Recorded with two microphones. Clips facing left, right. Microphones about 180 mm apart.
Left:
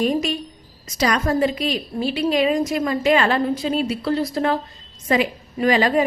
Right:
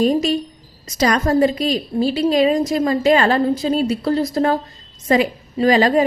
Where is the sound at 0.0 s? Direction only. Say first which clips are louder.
Right 4 dB; 35° right (ahead or behind).